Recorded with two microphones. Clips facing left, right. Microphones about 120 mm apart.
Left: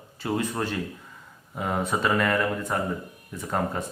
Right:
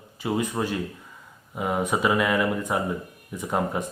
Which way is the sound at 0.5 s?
5° right (ahead or behind).